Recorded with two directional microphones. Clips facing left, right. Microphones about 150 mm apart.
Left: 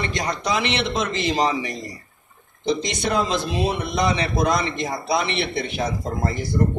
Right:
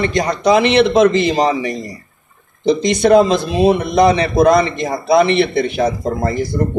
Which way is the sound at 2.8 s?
50° right (ahead or behind).